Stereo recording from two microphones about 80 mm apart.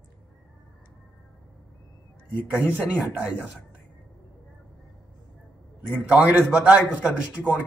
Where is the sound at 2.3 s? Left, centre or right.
Right.